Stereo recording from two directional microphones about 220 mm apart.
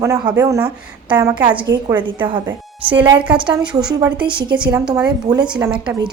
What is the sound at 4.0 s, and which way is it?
A woman's voice, 20° right (ahead or behind).